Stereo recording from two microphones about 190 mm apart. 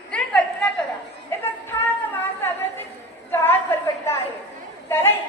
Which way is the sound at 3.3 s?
10° left (ahead or behind).